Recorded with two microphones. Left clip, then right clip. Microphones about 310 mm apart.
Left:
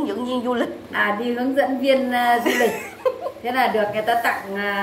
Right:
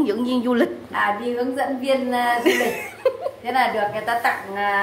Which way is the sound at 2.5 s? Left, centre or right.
Centre.